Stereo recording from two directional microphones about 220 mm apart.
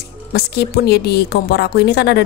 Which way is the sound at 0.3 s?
45° left (ahead or behind).